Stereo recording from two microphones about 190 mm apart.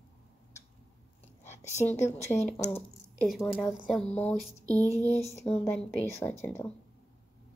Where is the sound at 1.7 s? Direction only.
35° left (ahead or behind).